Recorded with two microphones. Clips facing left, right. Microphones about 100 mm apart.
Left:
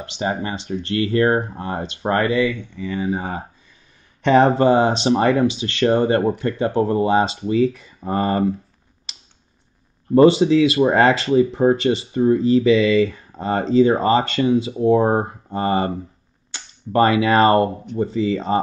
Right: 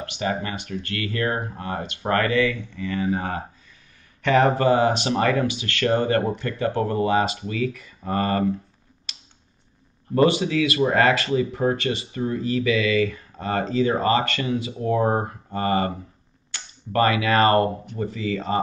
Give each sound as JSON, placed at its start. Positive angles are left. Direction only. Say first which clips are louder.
{"t": 0.0, "sound": "speech", "louder": "left 2 dB", "side_deg": 25}
{"t": 4.2, "sound": "speech", "louder": "left 4 dB", "side_deg": 25}
{"t": 10.1, "sound": "speech", "louder": "left 7 dB", "side_deg": 25}